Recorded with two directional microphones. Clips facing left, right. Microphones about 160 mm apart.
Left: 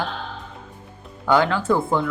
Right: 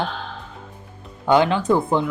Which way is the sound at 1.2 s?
20° right (ahead or behind).